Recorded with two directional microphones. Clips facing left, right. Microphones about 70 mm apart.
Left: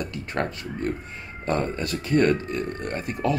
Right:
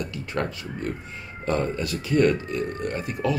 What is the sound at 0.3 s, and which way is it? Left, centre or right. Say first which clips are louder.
Speech: left 1 dB; left.